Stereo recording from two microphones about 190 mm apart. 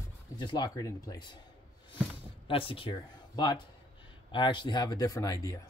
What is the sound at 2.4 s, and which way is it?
Speech, 30° left (ahead or behind).